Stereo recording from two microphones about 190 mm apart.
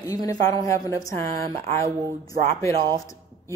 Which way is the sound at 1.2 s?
35° right (ahead or behind).